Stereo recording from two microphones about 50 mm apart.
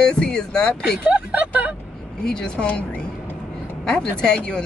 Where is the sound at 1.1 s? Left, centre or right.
Right.